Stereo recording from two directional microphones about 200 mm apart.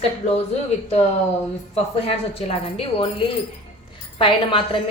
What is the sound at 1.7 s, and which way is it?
A woman's voice, 30° left (ahead or behind).